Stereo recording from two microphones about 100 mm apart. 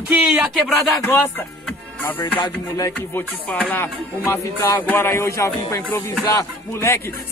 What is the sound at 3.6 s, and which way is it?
Speech, 20° left (ahead or behind).